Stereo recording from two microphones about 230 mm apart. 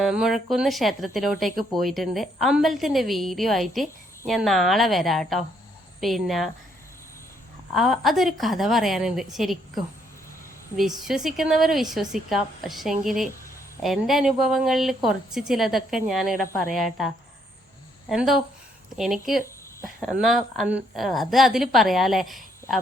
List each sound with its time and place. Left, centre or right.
0.0 s speech: centre
7.7 s speech: centre
18.1 s speech: centre